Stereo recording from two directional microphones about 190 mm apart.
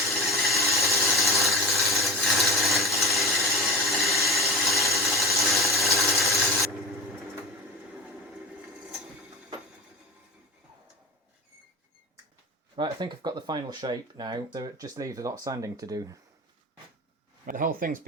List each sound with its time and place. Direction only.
0.1 s a sound: centre (ahead or behind)
12.7 s speech: 25° right (ahead or behind)
17.4 s speech: 45° right (ahead or behind)